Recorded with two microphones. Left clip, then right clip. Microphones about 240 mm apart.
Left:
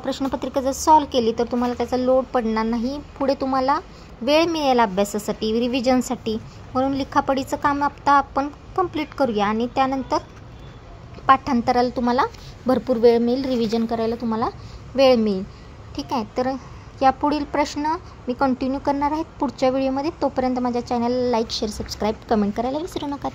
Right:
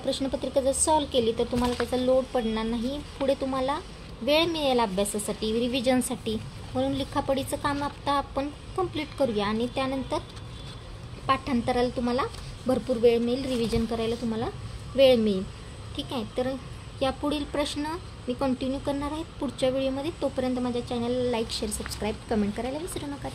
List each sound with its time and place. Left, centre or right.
0.0 s speech: left
11.2 s speech: left